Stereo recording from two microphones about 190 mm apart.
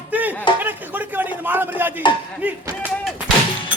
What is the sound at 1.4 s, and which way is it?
Speech, 10° right (ahead or behind).